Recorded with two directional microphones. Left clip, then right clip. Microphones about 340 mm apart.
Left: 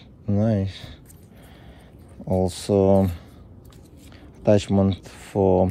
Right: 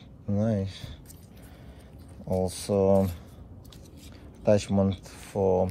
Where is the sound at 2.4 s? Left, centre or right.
Left.